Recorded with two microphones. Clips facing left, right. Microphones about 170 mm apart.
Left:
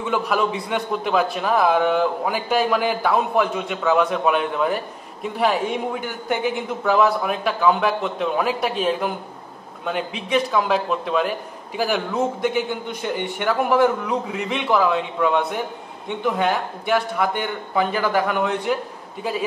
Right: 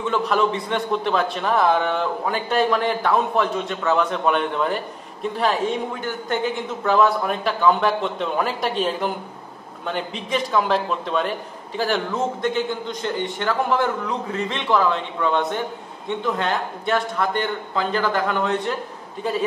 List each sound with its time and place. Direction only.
0.0 s a man's voice: 10° left (ahead or behind)